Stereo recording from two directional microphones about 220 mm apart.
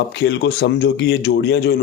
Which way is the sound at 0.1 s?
50° left (ahead or behind).